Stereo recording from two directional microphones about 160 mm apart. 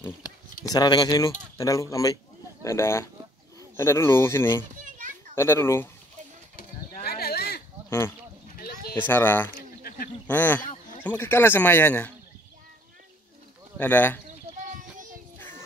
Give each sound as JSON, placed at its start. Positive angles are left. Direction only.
{"t": 0.7, "sound": "speech", "side_deg": 25}
{"t": 4.8, "sound": "children playing", "side_deg": -50}
{"t": 5.3, "sound": "speech", "side_deg": 15}
{"t": 6.5, "sound": "a sound", "side_deg": 65}
{"t": 8.9, "sound": "speech", "side_deg": 10}
{"t": 9.6, "sound": "a sound", "side_deg": 70}
{"t": 10.2, "sound": "speech", "side_deg": 10}
{"t": 13.7, "sound": "speech", "side_deg": 10}
{"t": 14.8, "sound": "child singing", "side_deg": -55}